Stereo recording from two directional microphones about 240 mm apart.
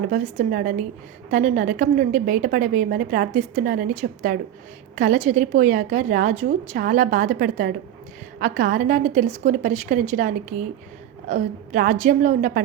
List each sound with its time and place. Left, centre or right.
0.1 s a woman's voice: right